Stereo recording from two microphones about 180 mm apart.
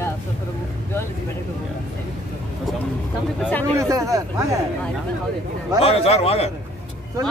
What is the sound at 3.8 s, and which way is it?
Speech, 20° right (ahead or behind).